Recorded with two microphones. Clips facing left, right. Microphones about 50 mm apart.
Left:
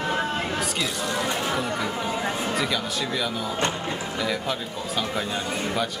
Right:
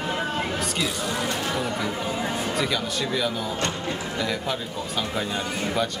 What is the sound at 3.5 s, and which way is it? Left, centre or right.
Speech, left.